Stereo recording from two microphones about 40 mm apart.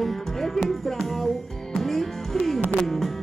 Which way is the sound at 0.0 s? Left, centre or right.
Centre.